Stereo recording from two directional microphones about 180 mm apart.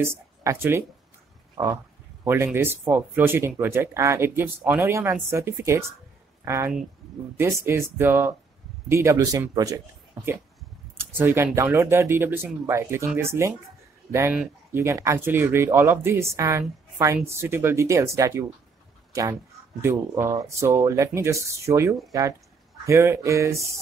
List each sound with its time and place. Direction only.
0.0 s speech: 15° right (ahead or behind)